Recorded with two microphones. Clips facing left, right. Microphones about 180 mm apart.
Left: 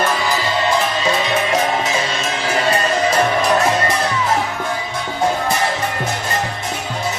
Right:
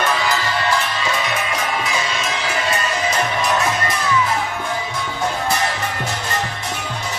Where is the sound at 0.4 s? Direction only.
20° left (ahead or behind); by 3.9 s 35° left (ahead or behind).